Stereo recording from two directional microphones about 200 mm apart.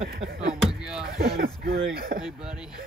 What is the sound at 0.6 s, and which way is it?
Speech, 5° right (ahead or behind).